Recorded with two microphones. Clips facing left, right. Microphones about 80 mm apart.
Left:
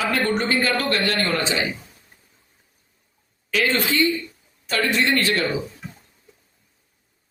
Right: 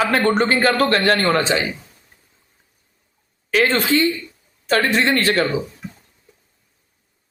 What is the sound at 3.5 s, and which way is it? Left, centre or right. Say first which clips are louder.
A man's voice: right 5 dB; right.